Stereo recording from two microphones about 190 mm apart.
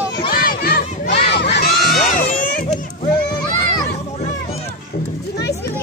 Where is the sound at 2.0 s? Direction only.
45° left (ahead or behind).